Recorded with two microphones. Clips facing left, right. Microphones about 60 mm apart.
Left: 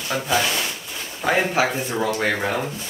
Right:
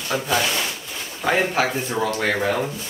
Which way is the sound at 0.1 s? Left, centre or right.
Centre.